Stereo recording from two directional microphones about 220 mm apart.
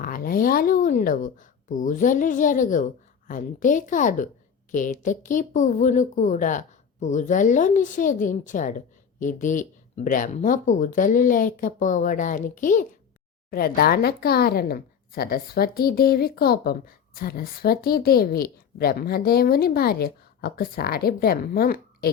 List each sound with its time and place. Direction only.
0.0 s a woman's voice: 40° left (ahead or behind)